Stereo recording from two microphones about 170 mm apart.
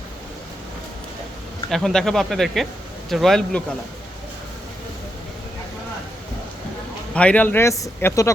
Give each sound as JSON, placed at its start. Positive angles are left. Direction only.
{"t": 1.7, "sound": "speech", "side_deg": 5}
{"t": 7.1, "sound": "a man's voice", "side_deg": 5}